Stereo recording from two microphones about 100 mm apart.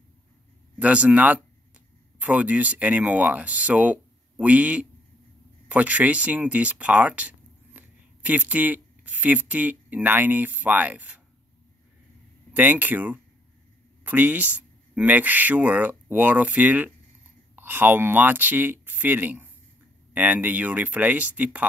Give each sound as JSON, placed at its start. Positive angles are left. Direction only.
{"t": 0.7, "sound": "speech", "side_deg": -15}
{"t": 12.5, "sound": "speech", "side_deg": -15}